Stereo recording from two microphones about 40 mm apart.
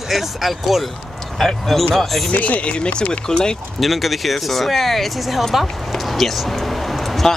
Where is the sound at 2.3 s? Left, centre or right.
Left; by 3.5 s centre.